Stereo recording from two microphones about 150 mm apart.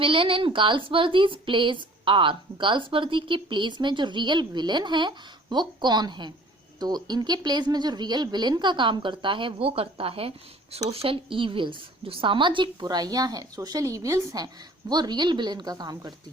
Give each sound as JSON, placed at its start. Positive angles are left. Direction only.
{"t": 0.0, "sound": "a woman's voice", "side_deg": -35}